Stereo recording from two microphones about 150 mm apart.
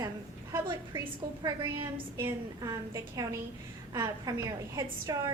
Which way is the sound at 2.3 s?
20° right (ahead or behind).